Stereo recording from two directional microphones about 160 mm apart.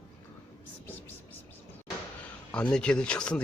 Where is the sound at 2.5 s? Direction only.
5° left (ahead or behind).